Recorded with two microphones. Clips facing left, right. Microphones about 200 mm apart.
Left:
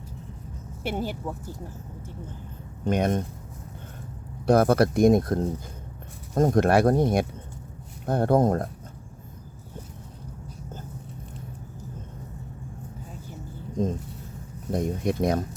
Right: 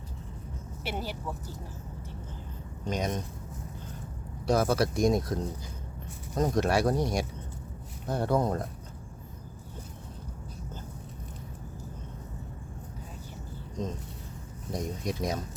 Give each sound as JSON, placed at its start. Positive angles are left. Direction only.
{"t": 0.9, "sound": "speech", "side_deg": 50}
{"t": 2.8, "sound": "speech", "side_deg": 55}
{"t": 4.4, "sound": "speech", "side_deg": 55}
{"t": 14.7, "sound": "speech", "side_deg": 55}